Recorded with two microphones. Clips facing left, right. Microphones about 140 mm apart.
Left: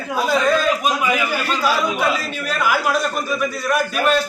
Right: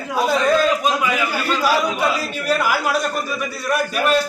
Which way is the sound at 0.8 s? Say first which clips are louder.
Even; 15° left (ahead or behind).